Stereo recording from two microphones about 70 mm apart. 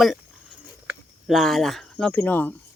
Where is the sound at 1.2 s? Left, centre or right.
Centre.